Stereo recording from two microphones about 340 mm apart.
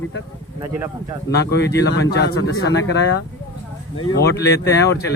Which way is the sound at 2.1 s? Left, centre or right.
Left.